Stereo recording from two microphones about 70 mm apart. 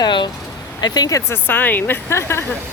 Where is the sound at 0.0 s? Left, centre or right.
Left.